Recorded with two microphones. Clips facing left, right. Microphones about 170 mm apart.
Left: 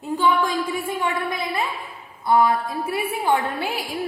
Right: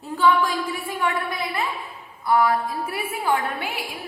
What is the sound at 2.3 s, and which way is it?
A woman's voice, 25° left (ahead or behind).